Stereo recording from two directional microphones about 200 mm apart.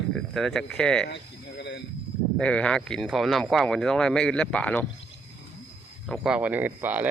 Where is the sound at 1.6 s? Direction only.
60° left (ahead or behind).